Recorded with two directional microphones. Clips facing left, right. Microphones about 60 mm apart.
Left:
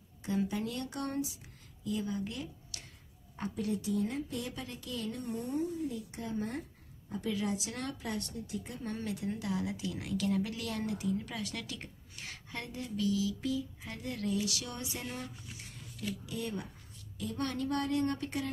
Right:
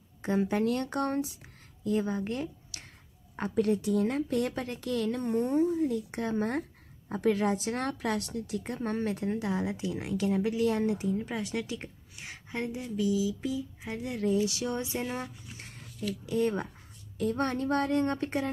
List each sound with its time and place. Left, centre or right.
0.2 s speech: right
3.3 s a woman's voice: right
8.0 s a woman's voice: right